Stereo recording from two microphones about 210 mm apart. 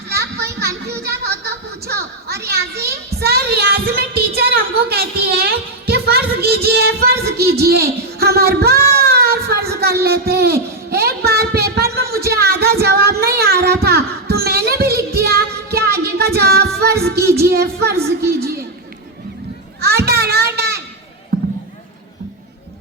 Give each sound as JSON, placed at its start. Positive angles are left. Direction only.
{"t": 0.1, "sound": "a sound", "side_deg": -50}
{"t": 7.6, "sound": "speech", "side_deg": -50}
{"t": 9.0, "sound": "a sound", "side_deg": -50}
{"t": 12.3, "sound": "music", "side_deg": -50}
{"t": 17.4, "sound": "speech", "side_deg": -50}
{"t": 19.8, "sound": "children playing", "side_deg": -50}